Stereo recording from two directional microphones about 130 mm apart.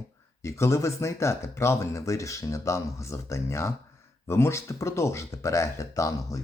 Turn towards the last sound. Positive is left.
turn(degrees=25)  # may be behind; listen again after turning